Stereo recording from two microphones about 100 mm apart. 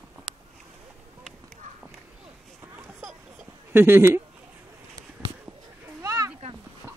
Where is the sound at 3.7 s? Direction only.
20° right (ahead or behind).